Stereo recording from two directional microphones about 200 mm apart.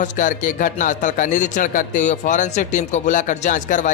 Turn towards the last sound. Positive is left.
turn(degrees=40)  # may be behind; listen again after turning